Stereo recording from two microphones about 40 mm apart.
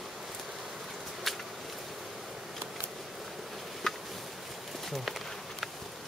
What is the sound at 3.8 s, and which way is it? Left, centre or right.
Insect, centre.